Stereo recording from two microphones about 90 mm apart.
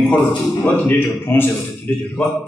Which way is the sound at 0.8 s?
20° left (ahead or behind).